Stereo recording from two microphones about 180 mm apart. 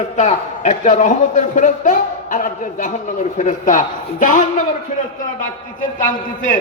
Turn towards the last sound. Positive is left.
turn(degrees=45)  # may be behind; listen again after turning